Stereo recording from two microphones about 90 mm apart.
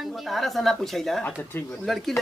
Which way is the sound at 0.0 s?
Centre (ahead or behind).